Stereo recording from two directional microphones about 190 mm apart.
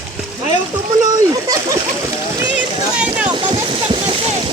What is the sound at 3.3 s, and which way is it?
Vehicle, 25° right (ahead or behind).